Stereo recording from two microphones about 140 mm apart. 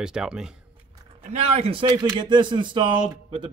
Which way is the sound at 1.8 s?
30° right (ahead or behind).